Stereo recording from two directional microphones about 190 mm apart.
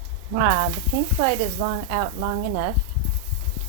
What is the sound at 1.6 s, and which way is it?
Speech, 20° right (ahead or behind).